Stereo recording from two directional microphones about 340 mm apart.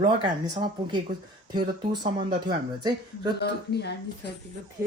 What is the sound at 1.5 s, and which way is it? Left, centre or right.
Speech, centre.